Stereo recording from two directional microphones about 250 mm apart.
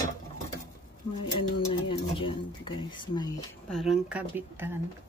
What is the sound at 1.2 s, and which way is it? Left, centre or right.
Speech, left.